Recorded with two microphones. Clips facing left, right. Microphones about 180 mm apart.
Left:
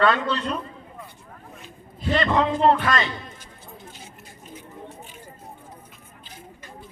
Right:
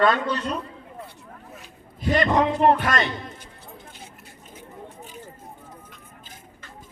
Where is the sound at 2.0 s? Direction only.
15° right (ahead or behind).